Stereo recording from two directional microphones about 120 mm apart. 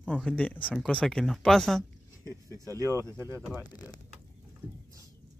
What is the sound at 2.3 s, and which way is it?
Speech, 30° right (ahead or behind).